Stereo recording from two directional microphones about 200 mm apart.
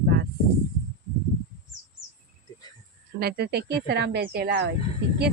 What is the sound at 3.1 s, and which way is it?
Speech, 50° right (ahead or behind).